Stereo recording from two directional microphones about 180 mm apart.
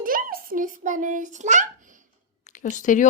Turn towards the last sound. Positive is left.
turn(degrees=45)  # may be behind; listen again after turning